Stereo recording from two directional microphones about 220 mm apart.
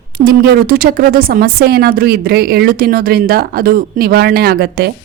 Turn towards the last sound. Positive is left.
turn(degrees=-45)  # may be behind; listen again after turning